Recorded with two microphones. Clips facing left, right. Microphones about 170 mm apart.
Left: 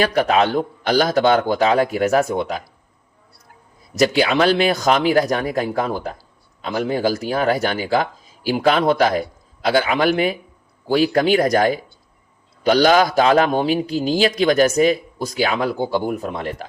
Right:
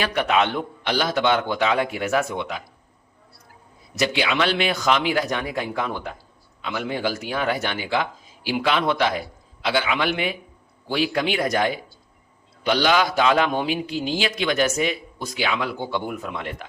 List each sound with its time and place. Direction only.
0.0 s a man's voice: 40° left (ahead or behind)
3.9 s a man's voice: 40° left (ahead or behind)